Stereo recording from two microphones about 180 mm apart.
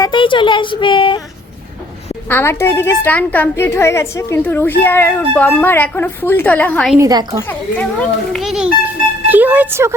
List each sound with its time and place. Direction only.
0.0 s speech: 25° left (ahead or behind)
2.3 s a woman's voice: 15° left (ahead or behind)
7.0 s a woman's voice: 20° right (ahead or behind)
7.8 s a child's voice: 5° left (ahead or behind); by 9.9 s 10° right (ahead or behind)